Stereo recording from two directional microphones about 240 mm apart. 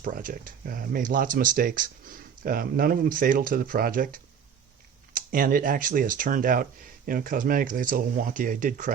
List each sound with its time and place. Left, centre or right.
0.0 s speech: right